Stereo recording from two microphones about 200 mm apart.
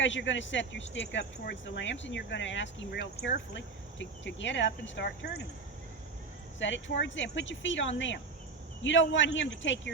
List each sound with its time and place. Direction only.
0.0 s speech: 70° left (ahead or behind)
6.6 s speech: 65° left (ahead or behind)